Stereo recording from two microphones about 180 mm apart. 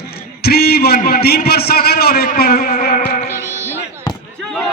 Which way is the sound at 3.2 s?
15° right (ahead or behind).